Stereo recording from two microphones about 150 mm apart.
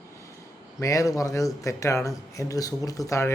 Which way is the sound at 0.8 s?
20° left (ahead or behind).